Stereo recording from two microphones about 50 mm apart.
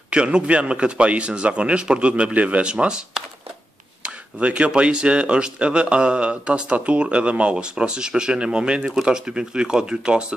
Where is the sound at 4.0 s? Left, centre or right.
Right.